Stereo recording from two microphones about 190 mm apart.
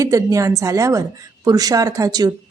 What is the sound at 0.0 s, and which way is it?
A woman's voice, 15° right (ahead or behind).